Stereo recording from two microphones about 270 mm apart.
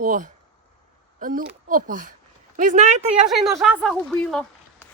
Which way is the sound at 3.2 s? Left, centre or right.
Centre.